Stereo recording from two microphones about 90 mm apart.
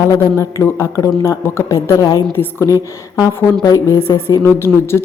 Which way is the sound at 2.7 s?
40° left (ahead or behind).